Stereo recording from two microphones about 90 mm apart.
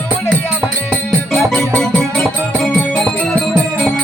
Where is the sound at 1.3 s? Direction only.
15° left (ahead or behind).